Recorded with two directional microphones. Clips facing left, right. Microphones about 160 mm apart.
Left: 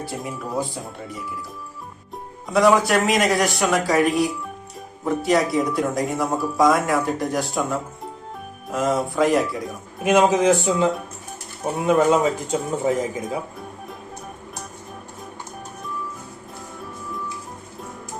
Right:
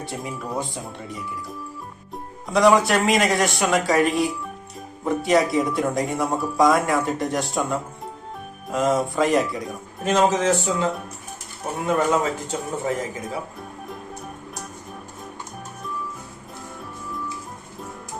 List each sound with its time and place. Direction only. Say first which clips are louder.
0.1 s speech: right 1 dB; centre (ahead or behind)
2.5 s speech: even; centre (ahead or behind)
10.0 s a man's voice: left 3 dB; 10° left (ahead or behind)
11.9 s a man's voice: left 3 dB; 15° left (ahead or behind)